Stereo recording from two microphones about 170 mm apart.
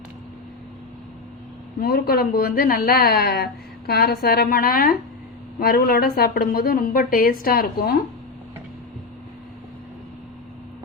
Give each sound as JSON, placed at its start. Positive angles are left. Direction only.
{"t": 1.8, "sound": "a woman's voice", "side_deg": 60}